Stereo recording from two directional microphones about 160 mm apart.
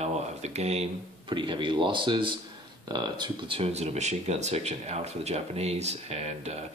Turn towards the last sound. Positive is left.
turn(degrees=-40)  # may be behind; listen again after turning